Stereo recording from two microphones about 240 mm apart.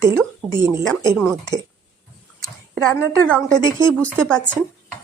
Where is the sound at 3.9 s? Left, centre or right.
Centre.